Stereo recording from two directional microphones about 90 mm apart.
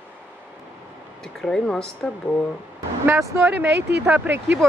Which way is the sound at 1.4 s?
5° left (ahead or behind).